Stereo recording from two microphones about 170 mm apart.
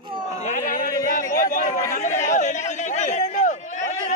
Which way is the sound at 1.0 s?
50° left (ahead or behind).